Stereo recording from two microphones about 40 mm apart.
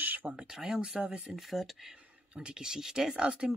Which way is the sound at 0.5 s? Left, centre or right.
Centre.